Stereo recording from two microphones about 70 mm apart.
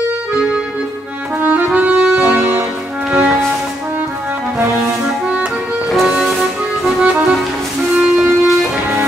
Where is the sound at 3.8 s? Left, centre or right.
Right.